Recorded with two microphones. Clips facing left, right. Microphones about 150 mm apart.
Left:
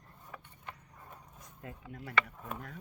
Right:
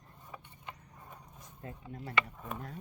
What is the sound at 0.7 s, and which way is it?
Vehicle, 15° right (ahead or behind).